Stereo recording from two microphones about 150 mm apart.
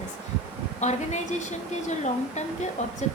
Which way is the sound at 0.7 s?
50° left (ahead or behind).